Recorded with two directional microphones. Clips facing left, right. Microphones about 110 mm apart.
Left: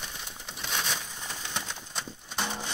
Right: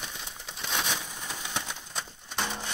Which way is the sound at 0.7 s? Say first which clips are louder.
Right 2 dB; 5° right (ahead or behind).